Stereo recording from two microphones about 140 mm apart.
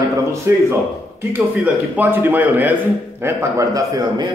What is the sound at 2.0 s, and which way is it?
A man's voice, 15° right (ahead or behind).